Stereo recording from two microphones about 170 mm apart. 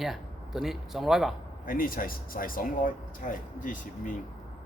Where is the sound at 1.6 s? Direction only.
55° left (ahead or behind).